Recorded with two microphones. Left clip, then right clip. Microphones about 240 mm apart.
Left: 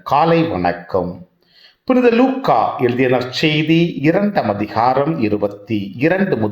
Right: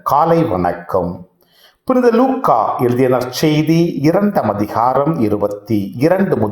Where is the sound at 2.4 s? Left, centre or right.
Centre.